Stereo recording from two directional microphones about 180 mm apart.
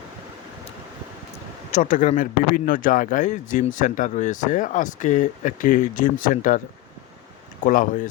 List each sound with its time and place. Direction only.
1.7 s a man's voice: 50° left (ahead or behind)
7.6 s a man's voice: 50° left (ahead or behind)